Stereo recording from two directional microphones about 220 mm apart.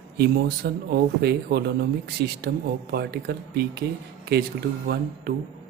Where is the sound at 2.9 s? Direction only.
50° right (ahead or behind).